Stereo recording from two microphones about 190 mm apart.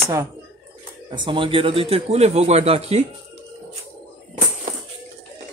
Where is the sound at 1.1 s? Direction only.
25° right (ahead or behind).